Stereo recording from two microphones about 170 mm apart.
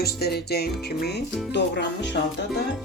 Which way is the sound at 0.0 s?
70° left (ahead or behind).